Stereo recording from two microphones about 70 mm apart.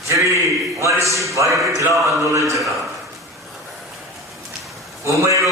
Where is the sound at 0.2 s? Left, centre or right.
Right.